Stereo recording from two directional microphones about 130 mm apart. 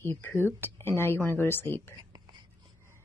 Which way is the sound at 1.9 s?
35° right (ahead or behind).